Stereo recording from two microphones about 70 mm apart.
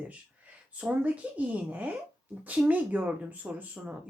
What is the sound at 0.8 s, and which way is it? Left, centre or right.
Speech, right.